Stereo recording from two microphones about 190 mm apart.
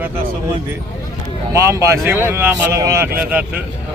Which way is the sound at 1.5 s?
15° right (ahead or behind).